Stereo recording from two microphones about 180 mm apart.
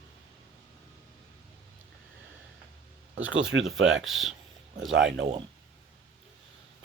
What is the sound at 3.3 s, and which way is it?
Speech, 90° right.